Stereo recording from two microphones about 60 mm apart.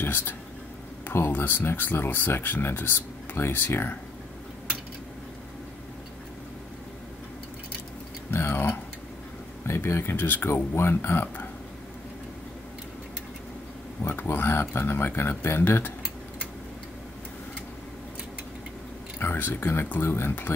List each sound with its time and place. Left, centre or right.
0.0 s speech: left
8.3 s tick-tock: left
9.7 s speech: left
14.0 s speech: left
14.3 s speech: left
19.1 s speech: left